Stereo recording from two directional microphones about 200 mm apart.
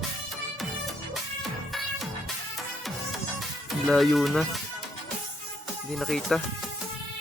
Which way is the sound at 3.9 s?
Centre (ahead or behind).